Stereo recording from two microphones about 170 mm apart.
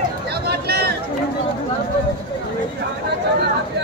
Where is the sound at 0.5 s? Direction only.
70° right (ahead or behind).